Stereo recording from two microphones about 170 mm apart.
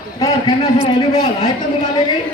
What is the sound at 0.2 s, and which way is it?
A man's voice, 25° left (ahead or behind).